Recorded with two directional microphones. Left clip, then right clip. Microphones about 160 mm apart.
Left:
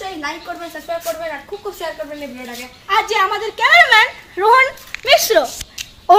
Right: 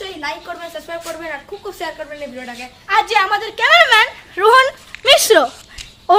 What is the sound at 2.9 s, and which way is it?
A woman's voice, 25° right (ahead or behind).